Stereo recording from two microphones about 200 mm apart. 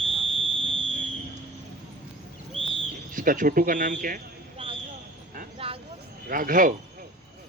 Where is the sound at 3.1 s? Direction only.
40° right (ahead or behind).